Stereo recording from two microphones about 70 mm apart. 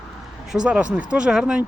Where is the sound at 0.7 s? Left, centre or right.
Centre.